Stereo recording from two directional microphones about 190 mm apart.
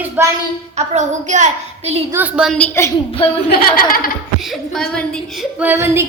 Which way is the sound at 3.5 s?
50° left (ahead or behind).